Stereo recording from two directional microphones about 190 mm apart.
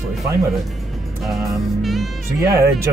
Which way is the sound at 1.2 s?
Centre (ahead or behind).